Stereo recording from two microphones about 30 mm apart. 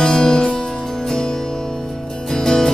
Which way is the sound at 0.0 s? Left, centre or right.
Left.